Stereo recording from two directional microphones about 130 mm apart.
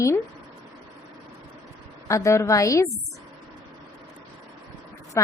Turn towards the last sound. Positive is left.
turn(degrees=20)  # may be behind; listen again after turning